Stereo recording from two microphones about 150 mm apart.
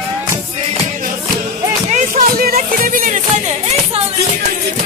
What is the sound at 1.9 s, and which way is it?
Music, 70° right (ahead or behind).